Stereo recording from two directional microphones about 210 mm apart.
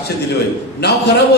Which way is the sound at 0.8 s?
50° left (ahead or behind).